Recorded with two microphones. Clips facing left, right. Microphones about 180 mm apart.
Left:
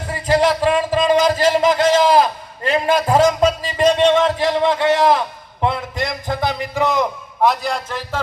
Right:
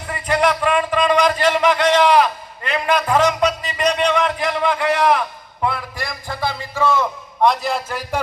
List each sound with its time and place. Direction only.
0.1 s a man's voice: 30° left (ahead or behind)
7.4 s a man's voice: centre (ahead or behind)